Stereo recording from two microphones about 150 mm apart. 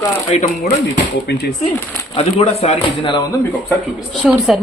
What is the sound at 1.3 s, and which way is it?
Speech, 90° left.